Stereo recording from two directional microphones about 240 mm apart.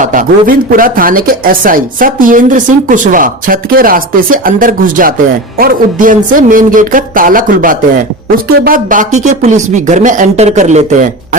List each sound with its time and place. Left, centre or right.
0.0 s speech: right